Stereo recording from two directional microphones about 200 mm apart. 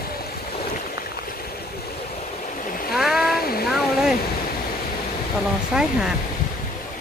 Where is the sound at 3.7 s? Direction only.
Centre (ahead or behind).